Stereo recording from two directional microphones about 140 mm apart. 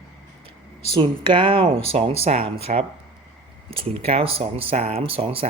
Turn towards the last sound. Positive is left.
turn(degrees=-45)  # may be behind; listen again after turning